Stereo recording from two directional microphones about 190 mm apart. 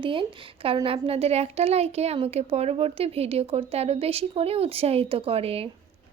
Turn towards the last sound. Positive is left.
turn(degrees=-30)  # may be behind; listen again after turning